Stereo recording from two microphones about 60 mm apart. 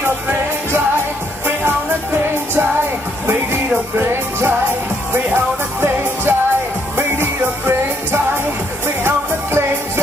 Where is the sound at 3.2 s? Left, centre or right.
Right.